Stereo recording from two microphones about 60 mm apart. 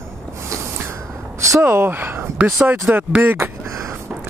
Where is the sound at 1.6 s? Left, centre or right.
Right.